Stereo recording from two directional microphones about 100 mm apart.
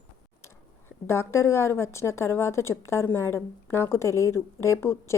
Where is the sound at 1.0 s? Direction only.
25° left (ahead or behind).